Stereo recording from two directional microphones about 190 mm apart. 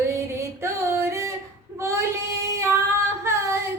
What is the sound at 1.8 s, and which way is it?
Child singing, 15° right (ahead or behind).